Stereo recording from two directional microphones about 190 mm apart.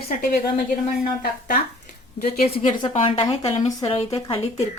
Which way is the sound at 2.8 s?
25° left (ahead or behind).